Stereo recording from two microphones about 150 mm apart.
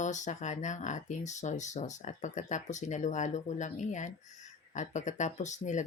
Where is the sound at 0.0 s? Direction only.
55° left (ahead or behind).